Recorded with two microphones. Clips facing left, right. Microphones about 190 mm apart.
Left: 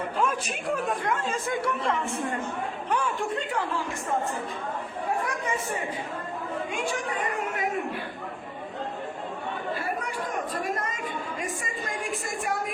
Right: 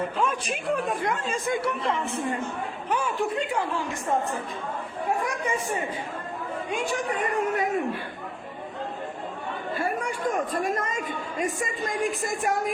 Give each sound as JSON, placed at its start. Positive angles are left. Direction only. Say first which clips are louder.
{"t": 0.2, "sound": "a man's voice", "louder": "even", "side_deg": 0}
{"t": 1.3, "sound": "speech", "louder": "right 2 dB", "side_deg": -15}